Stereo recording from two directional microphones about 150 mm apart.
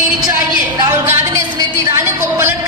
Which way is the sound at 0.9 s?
20° right (ahead or behind).